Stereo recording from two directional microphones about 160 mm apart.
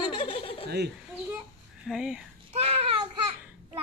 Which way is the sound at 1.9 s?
5° right (ahead or behind).